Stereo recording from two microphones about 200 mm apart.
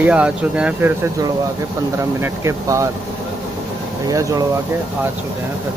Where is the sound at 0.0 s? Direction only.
5° right (ahead or behind).